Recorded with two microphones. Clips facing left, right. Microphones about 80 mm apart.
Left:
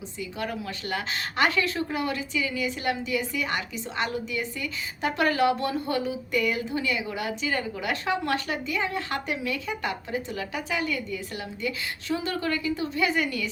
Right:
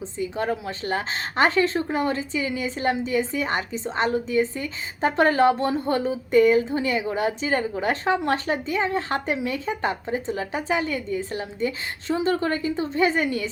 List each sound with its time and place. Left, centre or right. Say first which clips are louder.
0.2 s a woman's voice: right 6 dB; right